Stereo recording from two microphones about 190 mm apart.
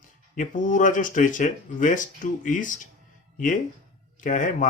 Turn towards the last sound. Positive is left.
turn(degrees=45)  # may be behind; listen again after turning